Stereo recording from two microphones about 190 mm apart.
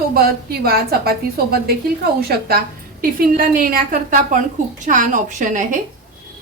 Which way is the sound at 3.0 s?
50° right (ahead or behind).